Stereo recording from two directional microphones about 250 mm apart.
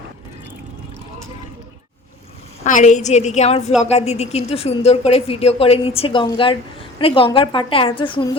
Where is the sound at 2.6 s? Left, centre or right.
Left.